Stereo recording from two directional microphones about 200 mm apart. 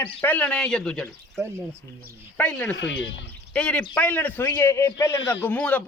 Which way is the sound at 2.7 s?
65° left (ahead or behind).